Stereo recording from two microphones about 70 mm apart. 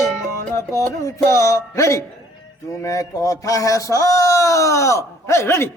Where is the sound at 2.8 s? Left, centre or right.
Left.